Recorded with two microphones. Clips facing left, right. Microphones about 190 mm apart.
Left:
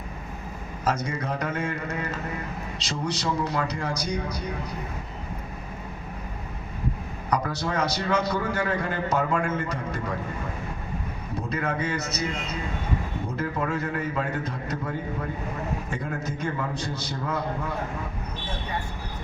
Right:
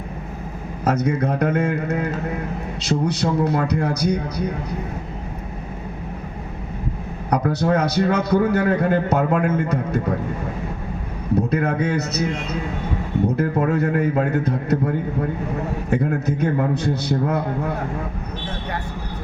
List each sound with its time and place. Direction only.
0.9 s a man's voice: 60° right (ahead or behind)
7.3 s a man's voice: 60° right (ahead or behind)
11.3 s a man's voice: 60° right (ahead or behind)
13.2 s a man's voice: 60° right (ahead or behind)
15.9 s a man's voice: 60° right (ahead or behind)